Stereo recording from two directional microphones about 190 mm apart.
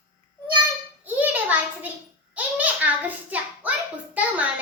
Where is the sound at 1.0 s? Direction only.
10° right (ahead or behind).